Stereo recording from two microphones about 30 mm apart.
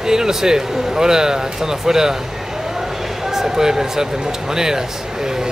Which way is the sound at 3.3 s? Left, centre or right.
Centre.